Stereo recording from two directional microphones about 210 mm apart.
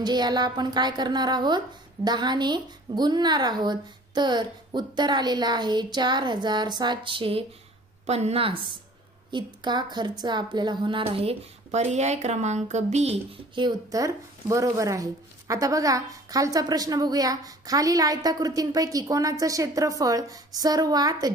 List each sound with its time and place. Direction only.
0.0 s a woman's voice: 20° right (ahead or behind)